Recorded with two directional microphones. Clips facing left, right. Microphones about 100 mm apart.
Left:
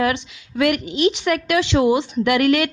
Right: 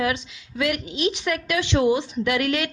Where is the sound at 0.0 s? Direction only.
65° left (ahead or behind).